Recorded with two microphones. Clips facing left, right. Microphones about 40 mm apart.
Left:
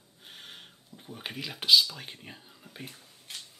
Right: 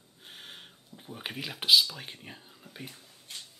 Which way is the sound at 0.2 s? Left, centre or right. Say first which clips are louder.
Even; centre.